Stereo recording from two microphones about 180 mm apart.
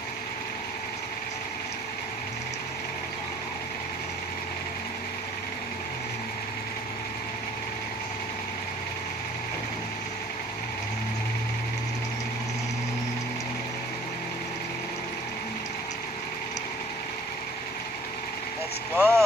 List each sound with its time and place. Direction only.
18.9 s vehicle: 15° right (ahead or behind)